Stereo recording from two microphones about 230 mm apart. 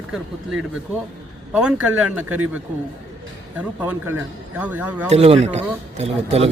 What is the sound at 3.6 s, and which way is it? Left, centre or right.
A man's voice, centre.